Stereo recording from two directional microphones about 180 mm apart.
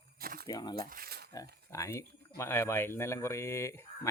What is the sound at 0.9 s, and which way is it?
Speech, 60° right (ahead or behind).